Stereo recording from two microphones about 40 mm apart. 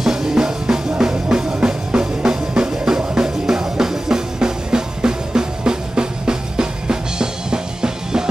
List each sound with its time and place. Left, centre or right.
0.0 s music: centre